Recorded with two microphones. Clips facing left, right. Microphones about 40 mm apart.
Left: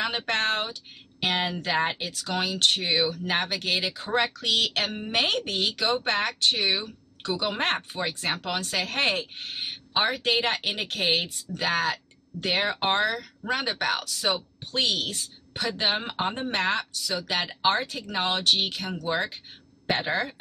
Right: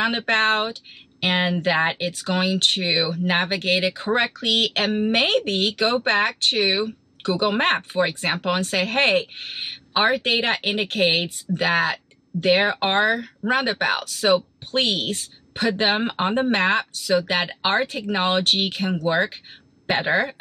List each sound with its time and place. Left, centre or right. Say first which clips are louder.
0.0 s speech: right 6 dB; right